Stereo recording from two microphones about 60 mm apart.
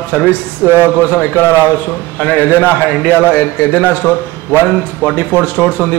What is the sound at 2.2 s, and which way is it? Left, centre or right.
A man's voice, left.